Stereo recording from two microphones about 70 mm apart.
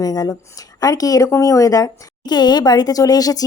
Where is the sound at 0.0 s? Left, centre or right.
Left.